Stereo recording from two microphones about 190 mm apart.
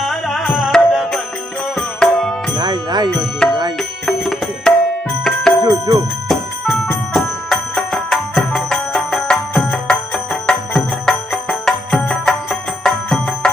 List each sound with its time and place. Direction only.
0.0 s music: centre (ahead or behind)
2.6 s music: 20° right (ahead or behind)
3.4 s music: 5° left (ahead or behind)
5.2 s bicycle bell: centre (ahead or behind)
5.6 s music: 20° right (ahead or behind)
6.2 s music: centre (ahead or behind)